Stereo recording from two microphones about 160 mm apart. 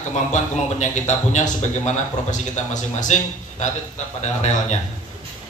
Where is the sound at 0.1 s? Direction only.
50° left (ahead or behind).